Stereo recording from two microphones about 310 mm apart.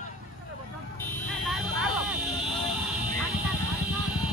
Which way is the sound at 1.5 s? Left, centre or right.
Centre.